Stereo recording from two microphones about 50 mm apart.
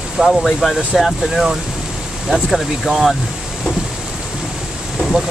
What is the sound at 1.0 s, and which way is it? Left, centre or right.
Speech, centre.